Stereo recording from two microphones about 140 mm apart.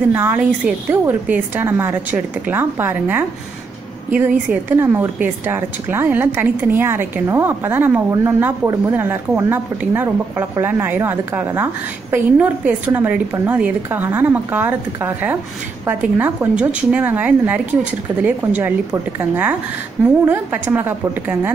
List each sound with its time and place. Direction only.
0.1 s a woman's voice: 15° right (ahead or behind)